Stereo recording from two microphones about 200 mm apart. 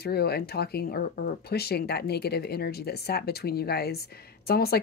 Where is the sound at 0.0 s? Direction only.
55° left (ahead or behind).